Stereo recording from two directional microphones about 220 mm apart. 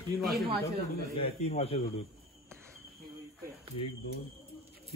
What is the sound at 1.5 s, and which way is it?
Speech, 25° left (ahead or behind).